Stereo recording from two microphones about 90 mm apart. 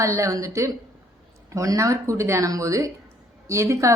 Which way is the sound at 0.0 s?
35° right (ahead or behind).